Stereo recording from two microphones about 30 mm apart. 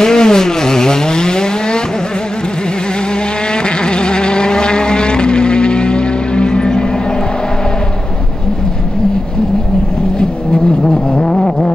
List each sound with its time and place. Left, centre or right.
0.0 s vehicle: left
3.8 s vehicle: left
10.1 s vehicle: left